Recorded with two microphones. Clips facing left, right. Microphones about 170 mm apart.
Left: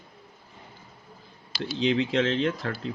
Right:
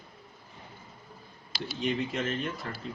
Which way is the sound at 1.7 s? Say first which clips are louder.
Left 7 dB; 90° left.